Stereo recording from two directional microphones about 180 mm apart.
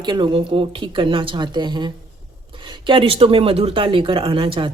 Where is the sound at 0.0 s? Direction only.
25° right (ahead or behind).